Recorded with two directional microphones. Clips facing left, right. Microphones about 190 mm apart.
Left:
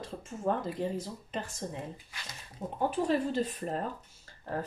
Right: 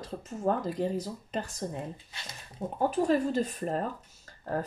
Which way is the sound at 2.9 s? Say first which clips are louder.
Right 3 dB; 45° right (ahead or behind).